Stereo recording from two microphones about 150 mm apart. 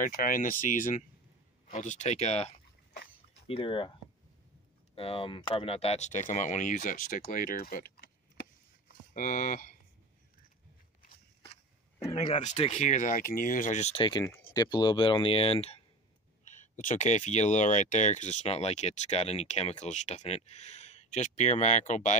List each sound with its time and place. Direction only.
0.0 s speech: 65° left (ahead or behind); by 3.9 s 35° left (ahead or behind)
4.9 s speech: 40° left (ahead or behind); by 7.9 s 75° left (ahead or behind)
9.1 s speech: 60° left (ahead or behind)
12.1 s speech: 35° left (ahead or behind)
12.4 s speech: 45° left (ahead or behind)
14.5 s speech: 25° left (ahead or behind)
16.4 s speech: 55° left (ahead or behind)